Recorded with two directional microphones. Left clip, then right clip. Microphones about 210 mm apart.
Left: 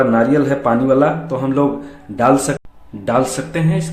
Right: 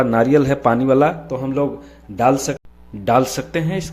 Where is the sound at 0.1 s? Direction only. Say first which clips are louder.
Left 1 dB; 40° right (ahead or behind).